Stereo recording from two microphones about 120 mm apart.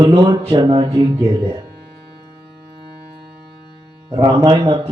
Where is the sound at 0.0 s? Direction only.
45° right (ahead or behind).